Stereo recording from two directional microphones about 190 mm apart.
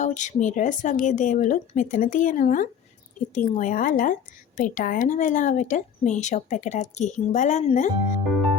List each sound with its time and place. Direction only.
0.0 s a woman's voice: 40° left (ahead or behind)